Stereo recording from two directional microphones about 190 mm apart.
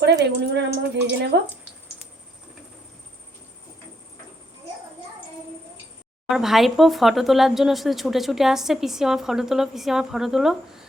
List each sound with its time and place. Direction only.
0.0 s speech: 65° right (ahead or behind)
6.2 s speech: centre (ahead or behind)